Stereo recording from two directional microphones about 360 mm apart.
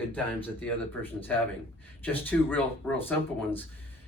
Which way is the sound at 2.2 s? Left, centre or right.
Centre.